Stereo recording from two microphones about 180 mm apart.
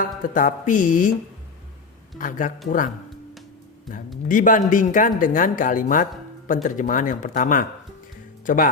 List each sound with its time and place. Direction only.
0.0 s speech: 45° left (ahead or behind)
2.1 s speech: 45° left (ahead or behind)
4.3 s speech: 45° left (ahead or behind)